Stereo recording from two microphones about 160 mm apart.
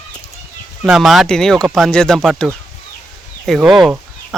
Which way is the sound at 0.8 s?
Centre (ahead or behind).